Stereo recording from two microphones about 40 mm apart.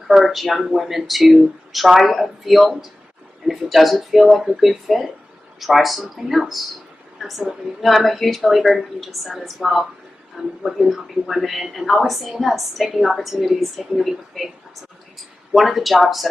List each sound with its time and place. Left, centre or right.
0.1 s a woman's voice: centre
15.5 s a woman's voice: centre